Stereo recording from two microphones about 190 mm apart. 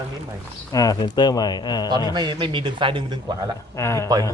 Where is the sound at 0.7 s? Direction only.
20° left (ahead or behind).